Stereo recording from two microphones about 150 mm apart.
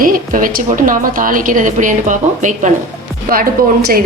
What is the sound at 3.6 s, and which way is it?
Speech, 80° right.